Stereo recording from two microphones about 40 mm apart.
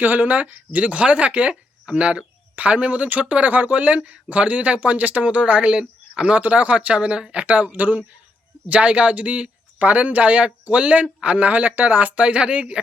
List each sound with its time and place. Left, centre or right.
0.0 s speech: right
7.4 s speech: right
8.7 s speech: right
12.1 s speech: right